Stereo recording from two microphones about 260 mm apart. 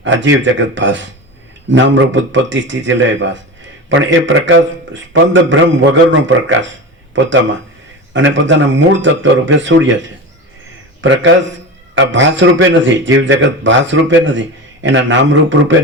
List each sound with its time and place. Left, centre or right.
0.0 s a man's voice: right